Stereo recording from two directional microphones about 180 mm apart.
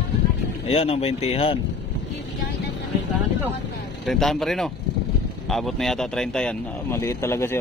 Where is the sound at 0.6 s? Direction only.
35° left (ahead or behind).